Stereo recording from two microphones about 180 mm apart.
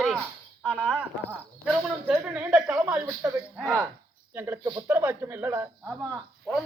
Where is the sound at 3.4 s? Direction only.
Centre (ahead or behind).